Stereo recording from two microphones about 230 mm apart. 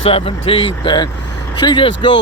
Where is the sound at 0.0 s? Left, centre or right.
Left.